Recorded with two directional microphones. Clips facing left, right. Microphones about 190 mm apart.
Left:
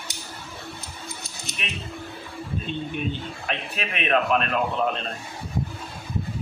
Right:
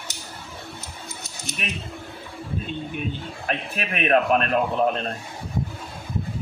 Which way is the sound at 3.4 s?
50° right (ahead or behind).